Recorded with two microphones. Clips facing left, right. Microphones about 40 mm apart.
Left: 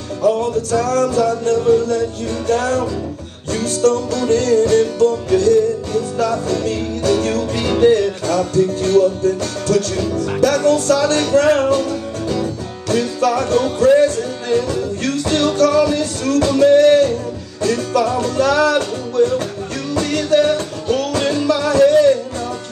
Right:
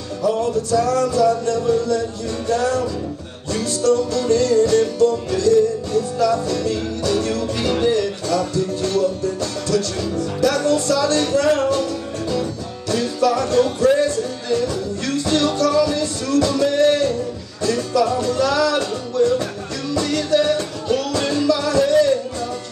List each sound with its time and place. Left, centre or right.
0.2 s music: left
11.7 s music: left
21.2 s music: left
21.5 s music: left